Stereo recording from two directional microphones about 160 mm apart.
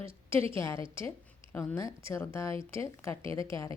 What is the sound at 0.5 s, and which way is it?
A woman's voice, 15° left (ahead or behind).